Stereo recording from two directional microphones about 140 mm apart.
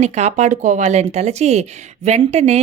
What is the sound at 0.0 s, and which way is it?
Speech, 55° right (ahead or behind).